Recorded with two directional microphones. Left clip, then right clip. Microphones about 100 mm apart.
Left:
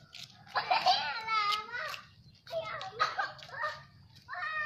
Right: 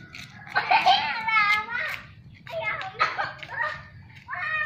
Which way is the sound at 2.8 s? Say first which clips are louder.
Right 5 dB; 25° left (ahead or behind).